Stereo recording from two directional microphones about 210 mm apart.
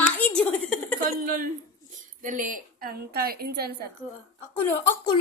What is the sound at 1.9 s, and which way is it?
A woman's voice, 40° right (ahead or behind).